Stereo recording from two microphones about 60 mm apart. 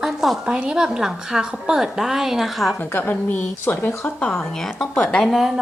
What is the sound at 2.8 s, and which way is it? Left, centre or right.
A woman's voice, left.